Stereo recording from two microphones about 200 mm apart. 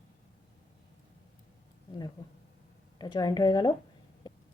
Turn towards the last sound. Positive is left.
turn(degrees=20)  # may be behind; listen again after turning